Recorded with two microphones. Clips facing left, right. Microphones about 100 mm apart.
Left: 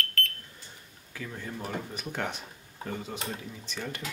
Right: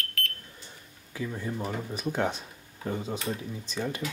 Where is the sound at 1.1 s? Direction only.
15° right (ahead or behind).